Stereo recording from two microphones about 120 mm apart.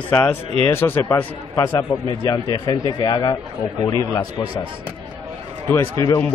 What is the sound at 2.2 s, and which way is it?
Speech, 35° left (ahead or behind).